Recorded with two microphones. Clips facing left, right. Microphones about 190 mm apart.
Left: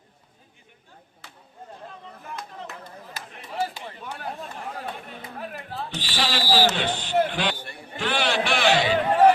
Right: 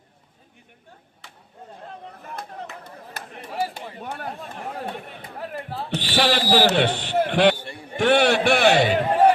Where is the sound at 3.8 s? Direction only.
55° right (ahead or behind).